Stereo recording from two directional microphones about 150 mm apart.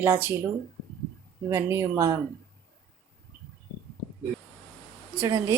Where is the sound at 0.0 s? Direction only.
15° right (ahead or behind).